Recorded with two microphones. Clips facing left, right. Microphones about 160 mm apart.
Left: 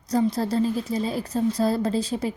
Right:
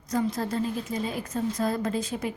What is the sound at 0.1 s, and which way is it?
A woman's voice, 35° left (ahead or behind).